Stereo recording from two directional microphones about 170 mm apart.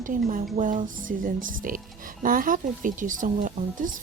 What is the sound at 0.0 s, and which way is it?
A woman's voice, 50° right (ahead or behind).